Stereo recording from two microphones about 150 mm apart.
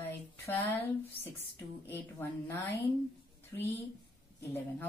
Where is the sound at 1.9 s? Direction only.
15° left (ahead or behind).